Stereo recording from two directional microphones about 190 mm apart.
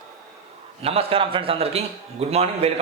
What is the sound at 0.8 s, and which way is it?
A man's voice, 30° right (ahead or behind).